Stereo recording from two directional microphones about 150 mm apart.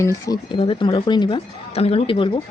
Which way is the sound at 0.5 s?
35° left (ahead or behind).